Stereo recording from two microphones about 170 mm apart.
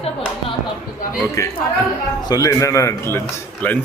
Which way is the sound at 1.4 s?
20° left (ahead or behind).